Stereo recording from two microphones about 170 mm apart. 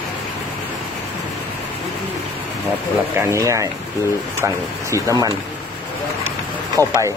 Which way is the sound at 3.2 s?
15° right (ahead or behind).